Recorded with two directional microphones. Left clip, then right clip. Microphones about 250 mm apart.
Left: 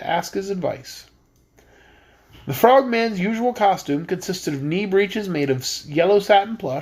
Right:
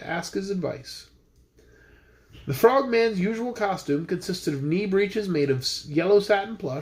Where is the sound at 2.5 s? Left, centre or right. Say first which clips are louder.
Left 5 dB; centre.